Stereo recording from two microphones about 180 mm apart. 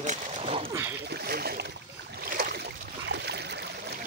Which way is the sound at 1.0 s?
60° right (ahead or behind).